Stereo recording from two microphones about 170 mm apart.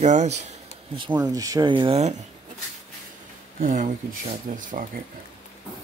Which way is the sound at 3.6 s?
50° right (ahead or behind).